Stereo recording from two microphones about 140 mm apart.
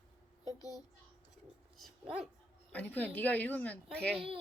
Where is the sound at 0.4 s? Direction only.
25° left (ahead or behind).